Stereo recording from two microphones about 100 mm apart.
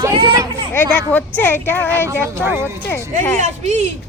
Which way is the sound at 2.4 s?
20° right (ahead or behind).